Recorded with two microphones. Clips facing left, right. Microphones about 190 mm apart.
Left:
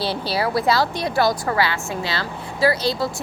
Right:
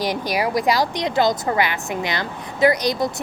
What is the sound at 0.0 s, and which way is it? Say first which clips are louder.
A woman's voice: right 1 dB; 15° right (ahead or behind).